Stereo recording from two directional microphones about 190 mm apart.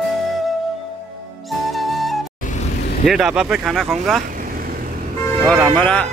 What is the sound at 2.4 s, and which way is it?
Vehicle, 45° left (ahead or behind).